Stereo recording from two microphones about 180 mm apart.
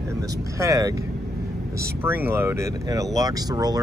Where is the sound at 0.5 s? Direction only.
20° right (ahead or behind).